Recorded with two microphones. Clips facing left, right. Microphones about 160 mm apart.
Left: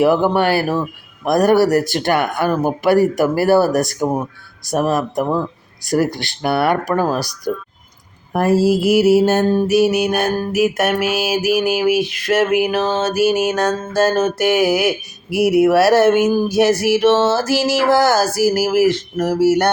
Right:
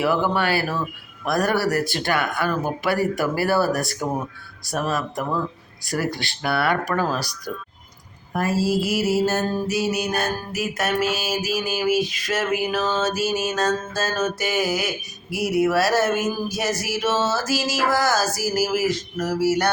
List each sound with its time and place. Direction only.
0.0 s speech: 45° left (ahead or behind)
6.4 s speech: 50° left (ahead or behind)
7.0 s speech: 15° left (ahead or behind)
7.5 s speech: 45° left (ahead or behind)
8.3 s music: 55° left (ahead or behind)